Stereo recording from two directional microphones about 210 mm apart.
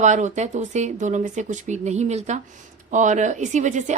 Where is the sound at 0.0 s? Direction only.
35° right (ahead or behind).